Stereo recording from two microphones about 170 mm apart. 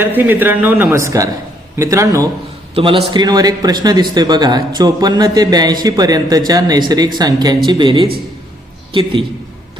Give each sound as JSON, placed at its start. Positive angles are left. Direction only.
{"t": 0.0, "sound": "speech", "side_deg": -10}
{"t": 2.7, "sound": "a man's voice", "side_deg": -30}